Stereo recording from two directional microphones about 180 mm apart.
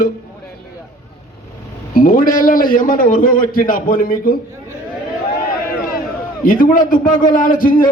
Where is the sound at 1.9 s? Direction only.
50° left (ahead or behind).